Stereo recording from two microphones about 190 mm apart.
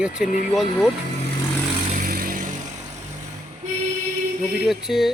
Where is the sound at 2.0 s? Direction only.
50° right (ahead or behind).